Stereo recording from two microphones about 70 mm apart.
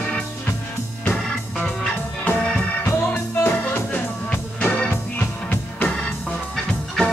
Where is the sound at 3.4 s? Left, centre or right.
Left.